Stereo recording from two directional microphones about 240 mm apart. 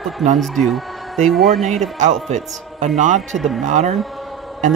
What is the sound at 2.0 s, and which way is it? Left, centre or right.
A man's voice, right.